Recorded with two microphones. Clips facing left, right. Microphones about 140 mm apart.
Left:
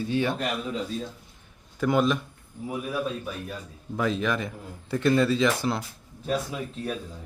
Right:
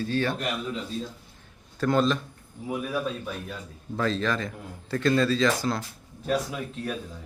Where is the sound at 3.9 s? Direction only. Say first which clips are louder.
Even; 10° left (ahead or behind).